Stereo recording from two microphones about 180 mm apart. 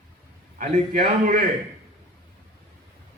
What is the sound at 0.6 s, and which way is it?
Speech, 55° right (ahead or behind).